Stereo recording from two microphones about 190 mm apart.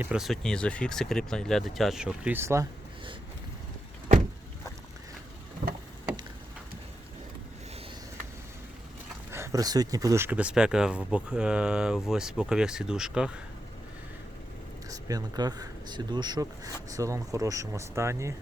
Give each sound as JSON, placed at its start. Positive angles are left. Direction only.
{"t": 0.0, "sound": "speech", "side_deg": -5}
{"t": 9.3, "sound": "speech", "side_deg": -15}
{"t": 14.8, "sound": "speech", "side_deg": -20}